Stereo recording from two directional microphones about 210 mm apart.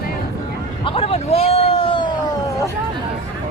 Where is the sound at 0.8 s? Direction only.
25° left (ahead or behind).